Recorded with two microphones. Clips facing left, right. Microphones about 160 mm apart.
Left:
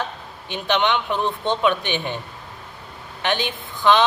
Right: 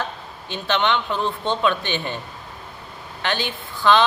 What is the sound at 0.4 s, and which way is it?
A woman's voice, 15° left (ahead or behind).